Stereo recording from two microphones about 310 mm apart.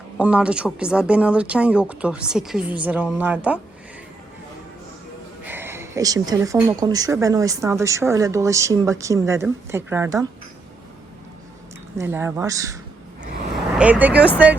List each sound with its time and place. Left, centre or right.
0.2 s speech: centre
5.5 s speech: centre
11.9 s speech: centre
13.7 s speech: centre